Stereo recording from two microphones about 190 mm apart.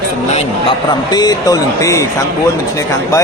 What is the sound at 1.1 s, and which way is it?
Speech, 20° left (ahead or behind).